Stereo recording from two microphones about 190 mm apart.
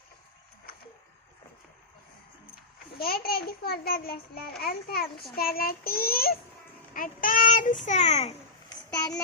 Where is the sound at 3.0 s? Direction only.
50° left (ahead or behind); by 8.4 s 35° left (ahead or behind).